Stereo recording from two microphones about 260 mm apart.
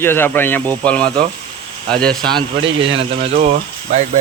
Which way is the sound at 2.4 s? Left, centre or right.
Right.